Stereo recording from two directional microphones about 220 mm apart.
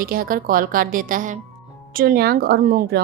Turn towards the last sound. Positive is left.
turn(degrees=-45)  # may be behind; listen again after turning